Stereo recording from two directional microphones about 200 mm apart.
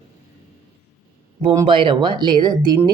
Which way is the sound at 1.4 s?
20° right (ahead or behind).